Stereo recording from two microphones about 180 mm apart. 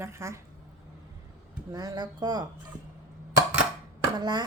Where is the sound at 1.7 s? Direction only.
20° right (ahead or behind).